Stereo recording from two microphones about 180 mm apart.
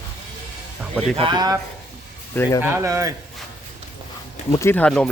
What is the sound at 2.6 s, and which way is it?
Speech, 15° right (ahead or behind).